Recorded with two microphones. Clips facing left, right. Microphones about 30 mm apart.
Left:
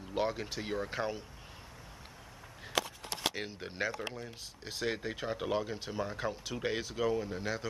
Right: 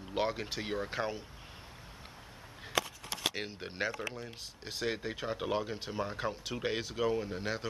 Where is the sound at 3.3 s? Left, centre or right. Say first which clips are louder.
Even; centre.